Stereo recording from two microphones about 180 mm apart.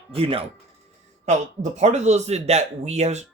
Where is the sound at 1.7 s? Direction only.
40° right (ahead or behind).